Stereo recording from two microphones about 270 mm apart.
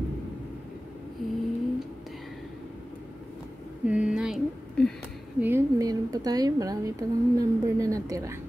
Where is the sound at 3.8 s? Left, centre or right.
Centre.